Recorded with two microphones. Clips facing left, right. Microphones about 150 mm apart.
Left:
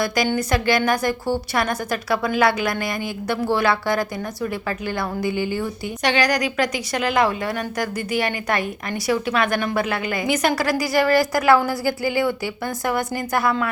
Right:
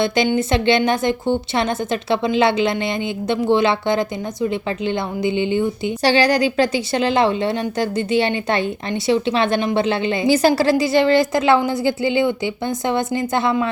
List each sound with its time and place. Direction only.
0.0 s a woman's voice: 25° right (ahead or behind)